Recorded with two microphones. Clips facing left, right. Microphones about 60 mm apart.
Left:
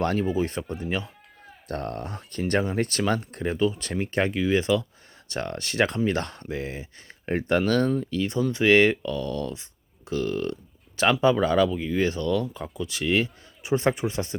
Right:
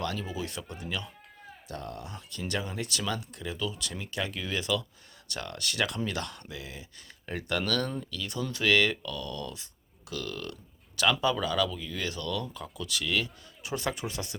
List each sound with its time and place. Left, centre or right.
0.0 s speech: left
1.6 s speech: left
4.3 s speech: left